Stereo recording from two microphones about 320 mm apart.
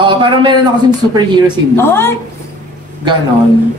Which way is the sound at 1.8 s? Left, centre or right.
Centre.